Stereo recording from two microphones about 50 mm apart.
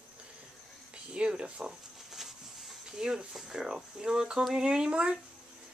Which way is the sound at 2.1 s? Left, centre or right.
Centre.